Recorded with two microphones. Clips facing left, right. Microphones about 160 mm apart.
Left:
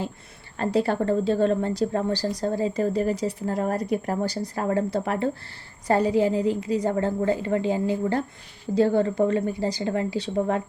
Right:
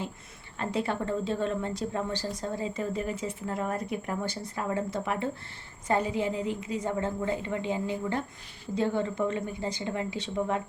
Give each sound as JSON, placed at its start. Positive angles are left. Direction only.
{"t": 0.6, "sound": "a woman's voice", "side_deg": 35}